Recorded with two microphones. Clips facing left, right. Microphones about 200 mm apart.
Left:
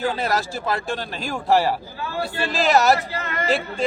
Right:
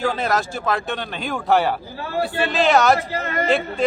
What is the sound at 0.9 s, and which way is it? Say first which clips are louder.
Speech: right 1 dB; centre (ahead or behind).